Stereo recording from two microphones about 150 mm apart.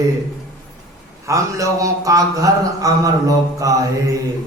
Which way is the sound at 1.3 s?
20° right (ahead or behind).